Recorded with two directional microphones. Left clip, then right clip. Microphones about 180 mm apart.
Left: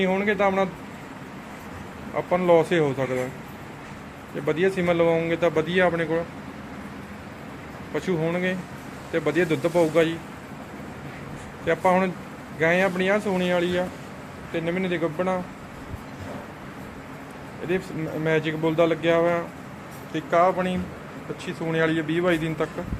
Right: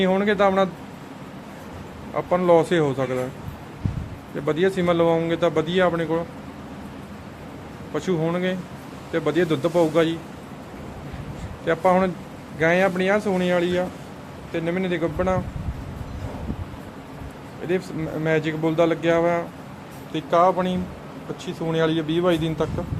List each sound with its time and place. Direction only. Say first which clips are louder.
0.0 s a man's voice: right 3 dB; 20° right (ahead or behind)
2.1 s a man's voice: right 2 dB; 5° right (ahead or behind)
4.4 s a man's voice: right 2 dB; 10° right (ahead or behind)
7.9 s a man's voice: right 1 dB; 10° right (ahead or behind)
11.6 s a man's voice: right 2 dB; 5° right (ahead or behind)
17.7 s a man's voice: right 2 dB; 5° right (ahead or behind)